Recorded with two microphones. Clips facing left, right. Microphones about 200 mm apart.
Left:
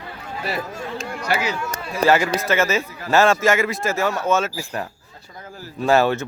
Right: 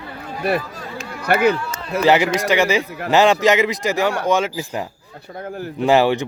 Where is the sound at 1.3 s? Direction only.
55° right (ahead or behind).